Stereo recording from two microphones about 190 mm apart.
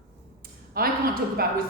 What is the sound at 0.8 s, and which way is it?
Speech, 50° right (ahead or behind).